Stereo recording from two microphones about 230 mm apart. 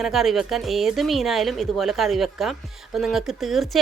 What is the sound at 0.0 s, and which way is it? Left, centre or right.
A woman's voice, centre.